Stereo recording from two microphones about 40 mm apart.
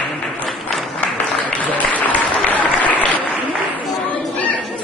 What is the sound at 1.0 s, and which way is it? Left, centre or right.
Applause, left.